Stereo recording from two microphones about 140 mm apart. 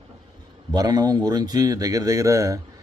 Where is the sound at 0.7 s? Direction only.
25° right (ahead or behind).